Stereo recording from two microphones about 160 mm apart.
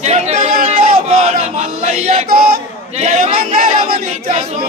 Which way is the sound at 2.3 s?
65° right (ahead or behind).